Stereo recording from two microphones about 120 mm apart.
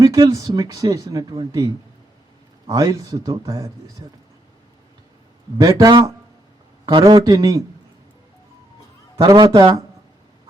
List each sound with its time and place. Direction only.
0.0 s speech: 30° right (ahead or behind)
5.5 s a man's voice: 30° right (ahead or behind)
9.2 s a man's voice: 35° right (ahead or behind)